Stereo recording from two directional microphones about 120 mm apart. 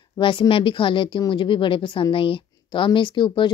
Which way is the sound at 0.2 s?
45° left (ahead or behind).